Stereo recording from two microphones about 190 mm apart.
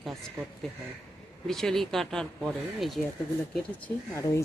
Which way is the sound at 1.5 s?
Centre (ahead or behind).